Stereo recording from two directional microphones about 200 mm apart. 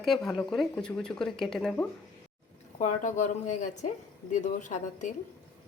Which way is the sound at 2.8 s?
40° left (ahead or behind).